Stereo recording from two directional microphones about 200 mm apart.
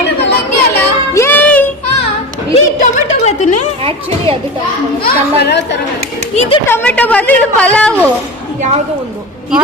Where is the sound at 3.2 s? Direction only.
35° left (ahead or behind).